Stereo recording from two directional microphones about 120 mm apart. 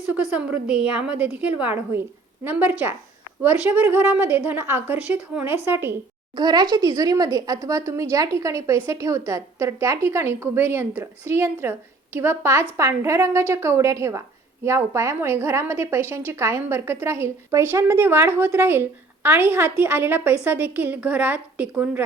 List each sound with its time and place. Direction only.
0.1 s a woman's voice: 10° right (ahead or behind)
6.3 s a woman's voice: 35° right (ahead or behind); by 22.0 s 15° right (ahead or behind)